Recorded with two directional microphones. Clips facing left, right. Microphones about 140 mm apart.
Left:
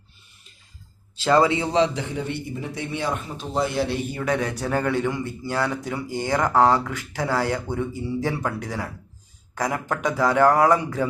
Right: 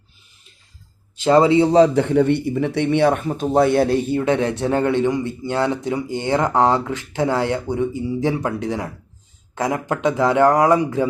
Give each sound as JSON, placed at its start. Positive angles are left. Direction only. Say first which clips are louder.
{"t": 1.1, "sound": "a man's voice", "louder": "right 5 dB", "side_deg": -20}
{"t": 1.9, "sound": "speech", "louder": "right 12 dB", "side_deg": -60}
{"t": 3.9, "sound": "a man's voice", "louder": "right 7 dB", "side_deg": -30}